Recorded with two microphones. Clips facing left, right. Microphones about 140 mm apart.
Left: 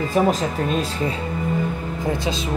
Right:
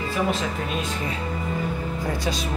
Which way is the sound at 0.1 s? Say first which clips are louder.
Left 5 dB; 40° left (ahead or behind).